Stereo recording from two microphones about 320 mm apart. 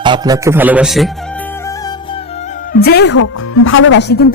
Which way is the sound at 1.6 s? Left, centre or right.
Centre.